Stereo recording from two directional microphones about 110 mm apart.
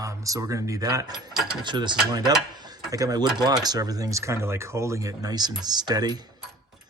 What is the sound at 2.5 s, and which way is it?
Cutlery, 40° right (ahead or behind).